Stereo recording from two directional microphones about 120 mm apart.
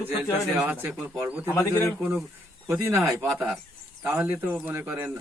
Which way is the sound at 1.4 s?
25° left (ahead or behind).